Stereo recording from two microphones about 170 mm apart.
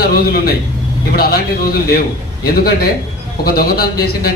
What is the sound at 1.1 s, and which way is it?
Speech, 65° left (ahead or behind).